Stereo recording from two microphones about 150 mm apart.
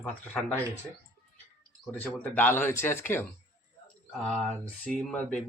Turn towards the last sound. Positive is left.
turn(degrees=5)  # may be behind; listen again after turning